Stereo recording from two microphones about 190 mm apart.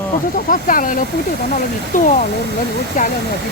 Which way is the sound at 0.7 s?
45° left (ahead or behind).